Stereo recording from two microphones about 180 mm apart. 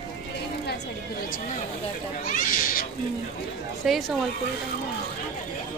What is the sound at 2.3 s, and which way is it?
Speech, 50° left (ahead or behind).